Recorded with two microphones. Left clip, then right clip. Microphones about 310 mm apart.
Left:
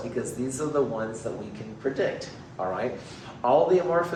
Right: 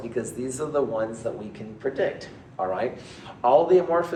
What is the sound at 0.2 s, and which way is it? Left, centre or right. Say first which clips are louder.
A man's voice: right 2 dB; right.